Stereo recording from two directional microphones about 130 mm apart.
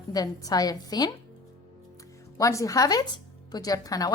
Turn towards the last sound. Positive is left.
turn(degrees=30)  # may be behind; listen again after turning